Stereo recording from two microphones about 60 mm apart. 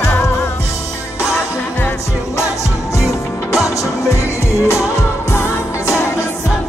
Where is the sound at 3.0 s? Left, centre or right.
Left.